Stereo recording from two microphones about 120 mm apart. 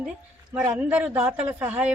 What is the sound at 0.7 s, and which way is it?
A man's voice, 15° right (ahead or behind).